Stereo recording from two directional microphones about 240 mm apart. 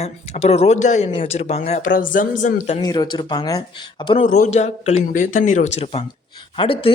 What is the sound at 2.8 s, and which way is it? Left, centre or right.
Speech, centre.